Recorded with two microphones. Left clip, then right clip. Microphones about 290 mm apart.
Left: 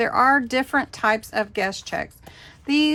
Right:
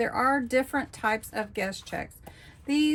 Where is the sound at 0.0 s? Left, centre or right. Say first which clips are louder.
Left 8 dB; centre.